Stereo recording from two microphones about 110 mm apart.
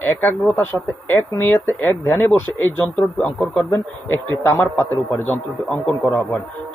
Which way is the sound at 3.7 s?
20° left (ahead or behind).